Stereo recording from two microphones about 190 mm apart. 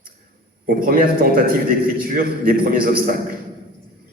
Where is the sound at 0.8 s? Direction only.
50° right (ahead or behind).